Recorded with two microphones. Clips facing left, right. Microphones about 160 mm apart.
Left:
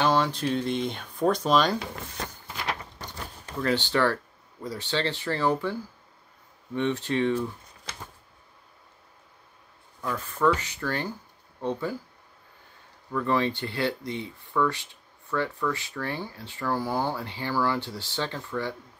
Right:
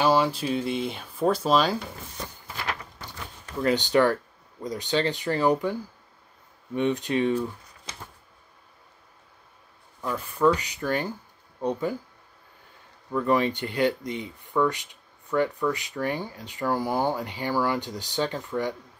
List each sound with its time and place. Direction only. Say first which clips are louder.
0.0 s speech: right 2 dB; 10° right (ahead or behind)
2.5 s a sound: even; 15° left (ahead or behind)
3.6 s speech: right 3 dB; 20° right (ahead or behind)
10.0 s speech: right 2 dB; 15° right (ahead or behind)
13.1 s speech: right 2 dB; 20° right (ahead or behind)